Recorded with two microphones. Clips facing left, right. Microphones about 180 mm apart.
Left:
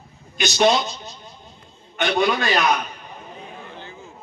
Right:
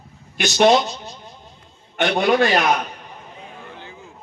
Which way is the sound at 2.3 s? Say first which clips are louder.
Right 5 dB; 55° right (ahead or behind).